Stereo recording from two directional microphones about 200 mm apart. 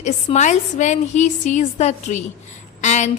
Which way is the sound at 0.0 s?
35° left (ahead or behind).